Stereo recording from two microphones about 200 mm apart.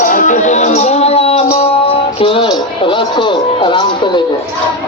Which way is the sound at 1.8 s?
25° left (ahead or behind).